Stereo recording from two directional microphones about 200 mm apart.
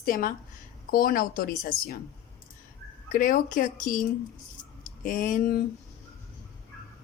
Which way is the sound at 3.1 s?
45° left (ahead or behind).